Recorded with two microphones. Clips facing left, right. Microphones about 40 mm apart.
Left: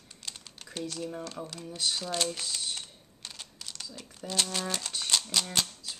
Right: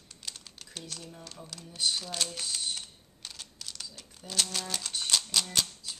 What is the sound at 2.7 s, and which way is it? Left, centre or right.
Camera, centre.